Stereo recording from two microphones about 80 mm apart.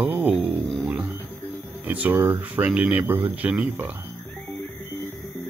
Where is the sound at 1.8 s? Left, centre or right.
Right.